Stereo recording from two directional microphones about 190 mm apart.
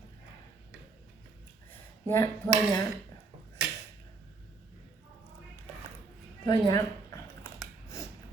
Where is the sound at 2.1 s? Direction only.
10° left (ahead or behind).